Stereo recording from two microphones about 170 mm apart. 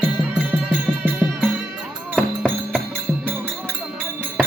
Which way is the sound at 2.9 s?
10° right (ahead or behind).